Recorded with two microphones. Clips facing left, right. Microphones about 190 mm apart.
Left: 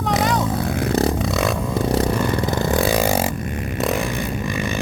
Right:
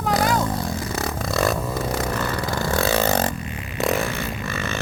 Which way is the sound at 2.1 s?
15° left (ahead or behind).